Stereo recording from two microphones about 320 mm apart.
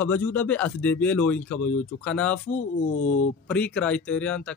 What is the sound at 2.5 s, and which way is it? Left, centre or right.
Speech, left.